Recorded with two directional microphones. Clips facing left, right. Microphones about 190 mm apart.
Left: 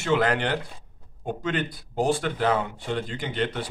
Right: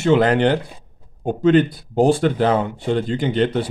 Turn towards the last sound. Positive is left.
turn(degrees=-30)  # may be behind; listen again after turning